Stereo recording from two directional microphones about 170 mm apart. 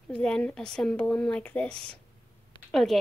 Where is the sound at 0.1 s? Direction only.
5° left (ahead or behind).